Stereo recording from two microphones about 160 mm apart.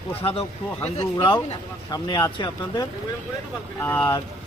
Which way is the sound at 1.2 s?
30° left (ahead or behind).